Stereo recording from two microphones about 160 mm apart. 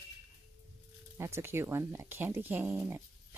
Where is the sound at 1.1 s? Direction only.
15° right (ahead or behind).